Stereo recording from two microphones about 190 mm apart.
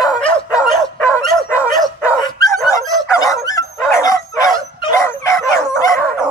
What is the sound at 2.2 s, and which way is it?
Dog, 20° left (ahead or behind).